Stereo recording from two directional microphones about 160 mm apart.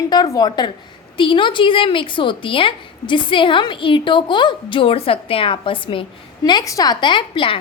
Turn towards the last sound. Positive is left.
turn(degrees=30)  # may be behind; listen again after turning